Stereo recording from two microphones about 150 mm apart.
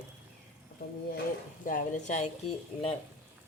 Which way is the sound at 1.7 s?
55° left (ahead or behind).